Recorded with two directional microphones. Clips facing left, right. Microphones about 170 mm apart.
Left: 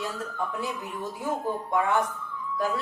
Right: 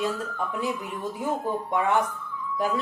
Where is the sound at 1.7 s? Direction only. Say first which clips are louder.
Right 1 dB; 20° right (ahead or behind).